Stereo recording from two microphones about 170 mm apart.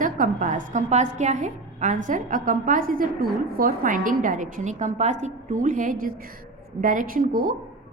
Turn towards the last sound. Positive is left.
turn(degrees=-55)  # may be behind; listen again after turning